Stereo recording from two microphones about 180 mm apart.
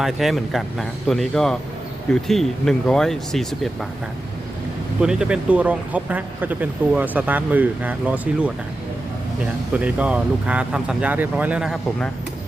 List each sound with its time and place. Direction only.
0.0 s speech: centre (ahead or behind)
4.9 s speech: 5° right (ahead or behind)